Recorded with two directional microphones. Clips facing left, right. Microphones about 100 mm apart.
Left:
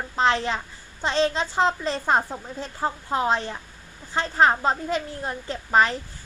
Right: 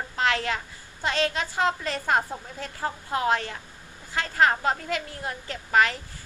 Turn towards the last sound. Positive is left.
turn(degrees=30)  # may be behind; listen again after turning